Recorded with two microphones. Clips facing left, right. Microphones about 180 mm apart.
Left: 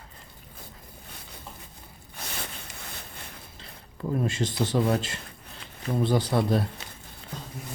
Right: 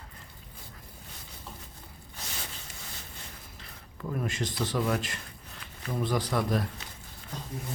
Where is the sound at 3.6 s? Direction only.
30° left (ahead or behind).